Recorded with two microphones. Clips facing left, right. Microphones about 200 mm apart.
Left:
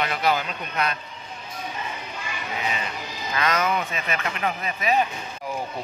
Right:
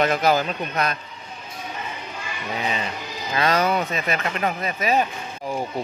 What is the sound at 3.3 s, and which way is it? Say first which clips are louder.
A man's voice: right 3 dB; 30° right (ahead or behind).